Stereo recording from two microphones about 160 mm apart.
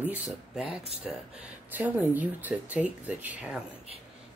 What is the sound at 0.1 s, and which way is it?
Speech, 5° right (ahead or behind).